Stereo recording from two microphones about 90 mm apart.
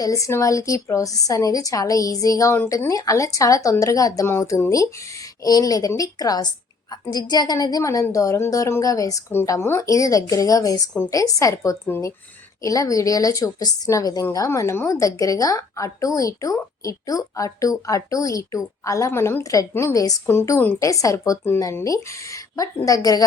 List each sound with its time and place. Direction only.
0.0 s a woman's voice: 35° left (ahead or behind)
5.4 s a woman's voice: 45° left (ahead or behind)
9.5 s a woman's voice: 30° left (ahead or behind)
20.7 s a woman's voice: 35° left (ahead or behind)